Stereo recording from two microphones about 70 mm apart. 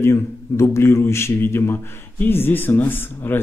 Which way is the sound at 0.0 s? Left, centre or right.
Left.